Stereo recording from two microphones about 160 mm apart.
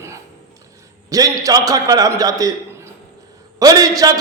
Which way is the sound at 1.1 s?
20° right (ahead or behind).